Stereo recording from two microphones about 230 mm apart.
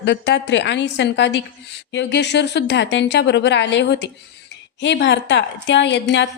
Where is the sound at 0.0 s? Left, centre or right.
Left.